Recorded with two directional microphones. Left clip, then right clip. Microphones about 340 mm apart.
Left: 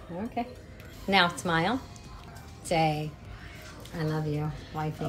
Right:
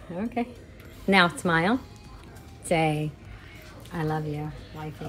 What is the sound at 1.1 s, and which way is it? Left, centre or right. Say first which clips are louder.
A woman's voice: right 3 dB; centre.